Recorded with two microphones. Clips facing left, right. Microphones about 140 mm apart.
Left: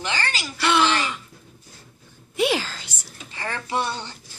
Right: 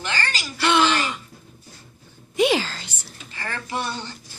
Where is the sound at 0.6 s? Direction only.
Centre (ahead or behind).